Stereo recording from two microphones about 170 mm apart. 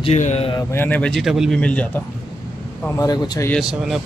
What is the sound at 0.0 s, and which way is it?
Speech, 45° left (ahead or behind).